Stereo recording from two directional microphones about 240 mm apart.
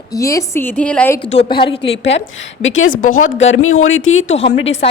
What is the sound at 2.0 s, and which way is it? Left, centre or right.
A woman's voice, left.